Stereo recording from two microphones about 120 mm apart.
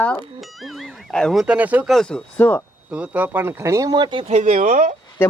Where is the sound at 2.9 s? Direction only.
10° right (ahead or behind).